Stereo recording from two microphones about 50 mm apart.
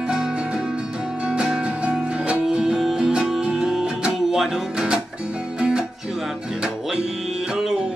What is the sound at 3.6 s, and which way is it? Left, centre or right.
Music, centre.